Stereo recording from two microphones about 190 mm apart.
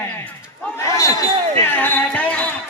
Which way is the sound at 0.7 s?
15° left (ahead or behind).